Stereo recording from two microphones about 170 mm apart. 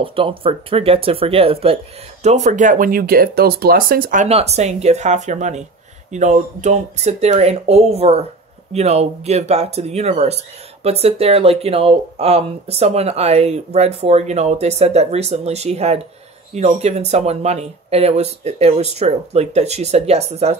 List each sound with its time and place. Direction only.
0.0 s speech: 30° right (ahead or behind)
2.2 s speech: 45° right (ahead or behind)
4.3 s speech: 35° right (ahead or behind)